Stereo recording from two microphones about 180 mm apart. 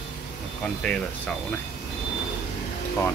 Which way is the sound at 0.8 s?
5° left (ahead or behind).